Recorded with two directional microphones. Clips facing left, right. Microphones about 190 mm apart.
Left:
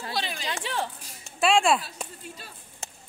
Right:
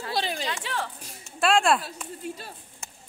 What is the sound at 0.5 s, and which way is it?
Music, 25° left (ahead or behind).